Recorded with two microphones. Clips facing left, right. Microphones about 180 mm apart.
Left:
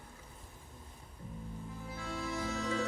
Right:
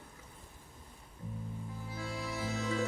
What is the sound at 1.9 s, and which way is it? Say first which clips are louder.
Music: left 1 dB; 35° right (ahead or behind).